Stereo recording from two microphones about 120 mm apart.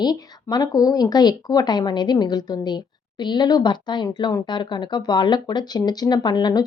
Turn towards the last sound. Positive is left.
turn(degrees=35)  # may be behind; listen again after turning